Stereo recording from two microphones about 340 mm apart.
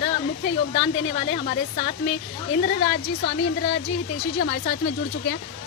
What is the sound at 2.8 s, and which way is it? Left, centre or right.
Speech, left.